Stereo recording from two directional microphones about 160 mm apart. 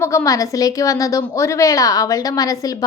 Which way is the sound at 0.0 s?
15° left (ahead or behind).